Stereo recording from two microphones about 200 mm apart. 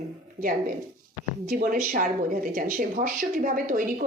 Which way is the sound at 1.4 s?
45° right (ahead or behind).